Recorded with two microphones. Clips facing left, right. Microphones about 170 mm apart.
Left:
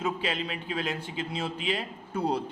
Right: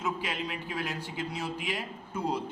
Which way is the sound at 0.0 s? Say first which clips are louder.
Left 3 dB; 30° left (ahead or behind).